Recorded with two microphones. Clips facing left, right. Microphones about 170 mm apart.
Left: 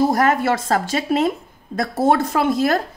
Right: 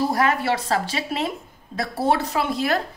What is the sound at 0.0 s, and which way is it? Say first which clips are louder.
A woman's voice: left 4 dB; 45° left (ahead or behind).